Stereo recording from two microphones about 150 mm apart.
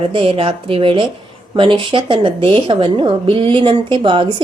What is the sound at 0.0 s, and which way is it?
A woman's voice, 35° right (ahead or behind).